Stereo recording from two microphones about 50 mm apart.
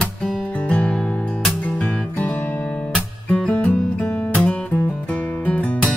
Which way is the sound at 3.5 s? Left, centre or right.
Left.